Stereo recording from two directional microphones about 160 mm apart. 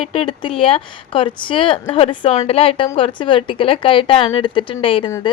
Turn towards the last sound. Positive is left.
turn(degrees=35)  # may be behind; listen again after turning